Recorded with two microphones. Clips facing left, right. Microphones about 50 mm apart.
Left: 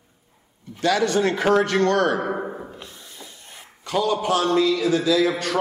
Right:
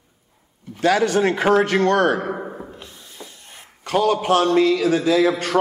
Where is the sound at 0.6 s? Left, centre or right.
Right.